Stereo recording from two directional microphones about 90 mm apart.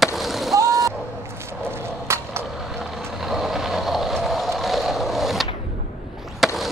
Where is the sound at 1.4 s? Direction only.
30° right (ahead or behind).